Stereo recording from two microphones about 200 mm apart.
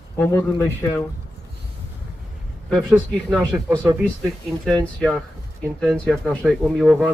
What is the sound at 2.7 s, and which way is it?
Speech, centre (ahead or behind).